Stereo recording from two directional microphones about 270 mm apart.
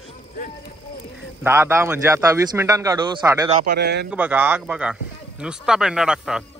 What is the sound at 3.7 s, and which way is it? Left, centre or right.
Speech, right.